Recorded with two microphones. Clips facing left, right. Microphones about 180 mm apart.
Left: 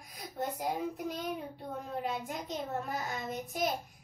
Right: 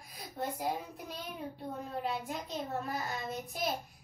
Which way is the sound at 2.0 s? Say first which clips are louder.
Even; 15° left (ahead or behind).